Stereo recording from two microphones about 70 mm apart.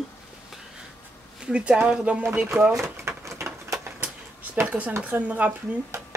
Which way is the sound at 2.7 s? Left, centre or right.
Right.